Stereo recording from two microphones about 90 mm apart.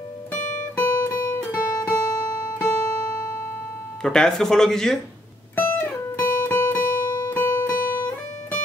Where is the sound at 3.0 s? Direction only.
35° left (ahead or behind).